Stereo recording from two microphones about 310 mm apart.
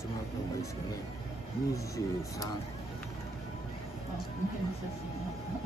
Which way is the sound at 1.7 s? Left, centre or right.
Centre.